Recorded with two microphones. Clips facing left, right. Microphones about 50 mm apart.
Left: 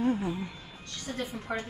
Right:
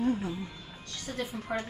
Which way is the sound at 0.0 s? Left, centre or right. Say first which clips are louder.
Left 1 dB; centre.